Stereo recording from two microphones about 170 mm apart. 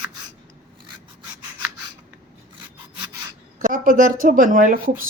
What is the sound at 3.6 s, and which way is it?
Speech, 55° right (ahead or behind).